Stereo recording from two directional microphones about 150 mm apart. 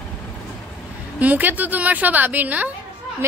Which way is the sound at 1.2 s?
10° right (ahead or behind).